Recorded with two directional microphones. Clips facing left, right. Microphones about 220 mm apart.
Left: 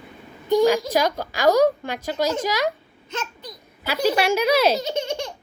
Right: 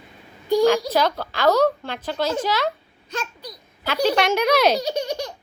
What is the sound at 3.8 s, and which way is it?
Speech, 5° left (ahead or behind).